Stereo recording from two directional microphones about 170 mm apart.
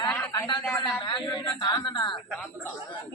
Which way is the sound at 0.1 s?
10° left (ahead or behind).